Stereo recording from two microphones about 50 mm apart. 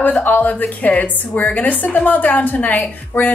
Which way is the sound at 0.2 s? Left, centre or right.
Left.